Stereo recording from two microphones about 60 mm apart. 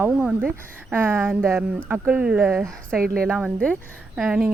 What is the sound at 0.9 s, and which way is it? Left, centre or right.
Speech, right.